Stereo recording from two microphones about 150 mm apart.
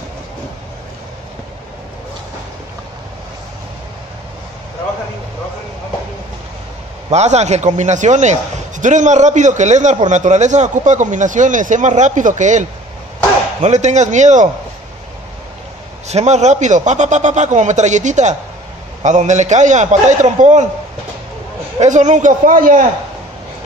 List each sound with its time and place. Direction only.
7.1 s a man's voice: 50° right (ahead or behind)
16.1 s a man's voice: 50° right (ahead or behind)
21.7 s a man's voice: 55° right (ahead or behind)